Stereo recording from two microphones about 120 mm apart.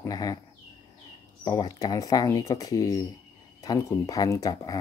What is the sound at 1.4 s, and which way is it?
Speech, 35° left (ahead or behind).